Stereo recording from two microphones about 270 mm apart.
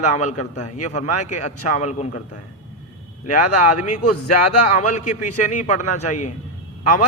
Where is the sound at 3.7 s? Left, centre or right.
Left.